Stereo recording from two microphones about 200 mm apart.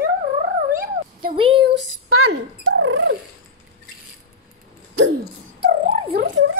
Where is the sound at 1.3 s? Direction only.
25° right (ahead or behind).